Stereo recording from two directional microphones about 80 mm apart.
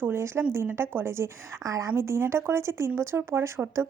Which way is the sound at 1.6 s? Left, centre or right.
Right.